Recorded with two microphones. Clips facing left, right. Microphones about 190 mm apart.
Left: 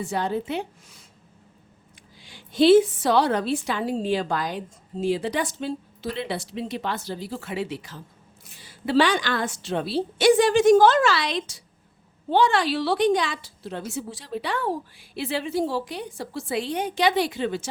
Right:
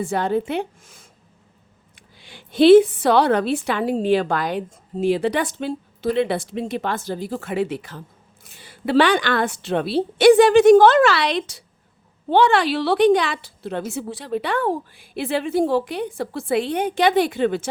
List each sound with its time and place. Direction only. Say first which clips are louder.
0.0 s a woman's voice: right 5 dB; 55° right (ahead or behind)
2.1 s a woman's voice: right 3 dB; 60° right (ahead or behind)